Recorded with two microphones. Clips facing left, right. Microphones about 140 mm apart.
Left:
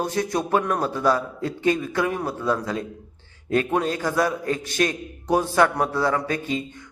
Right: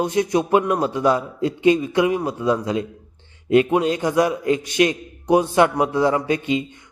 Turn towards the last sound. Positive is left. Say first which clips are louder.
# right 4 dB
turn(degrees=-20)  # may be behind; listen again after turning